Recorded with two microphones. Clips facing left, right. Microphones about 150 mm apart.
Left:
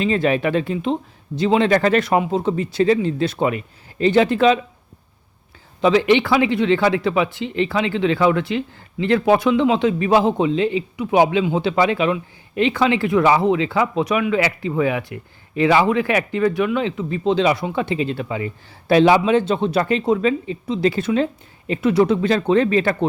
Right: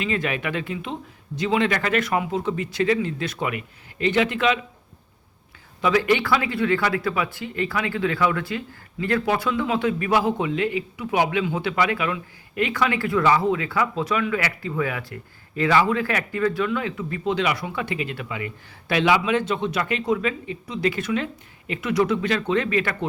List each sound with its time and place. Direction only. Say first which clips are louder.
0.0 s speech: left 7 dB; 30° left (ahead or behind)
5.8 s speech: left 5 dB; 20° left (ahead or behind)